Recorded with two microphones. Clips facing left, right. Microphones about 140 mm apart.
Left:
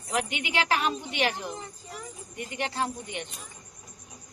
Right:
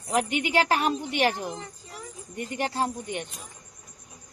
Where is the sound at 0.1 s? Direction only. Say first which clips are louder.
Right 5 dB; 40° right (ahead or behind).